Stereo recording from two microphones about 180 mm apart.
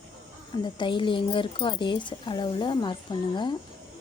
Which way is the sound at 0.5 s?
25° left (ahead or behind).